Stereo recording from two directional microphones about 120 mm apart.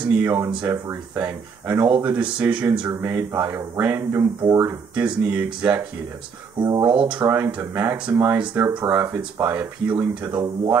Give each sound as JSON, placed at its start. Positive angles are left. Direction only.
{"t": 0.1, "sound": "speech", "side_deg": -15}
{"t": 4.9, "sound": "speech", "side_deg": -10}
{"t": 6.6, "sound": "speech", "side_deg": -30}
{"t": 7.1, "sound": "speech", "side_deg": -15}
{"t": 10.3, "sound": "speech", "side_deg": -30}